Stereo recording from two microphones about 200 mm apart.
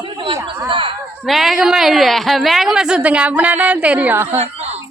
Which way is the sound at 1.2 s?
Centre (ahead or behind).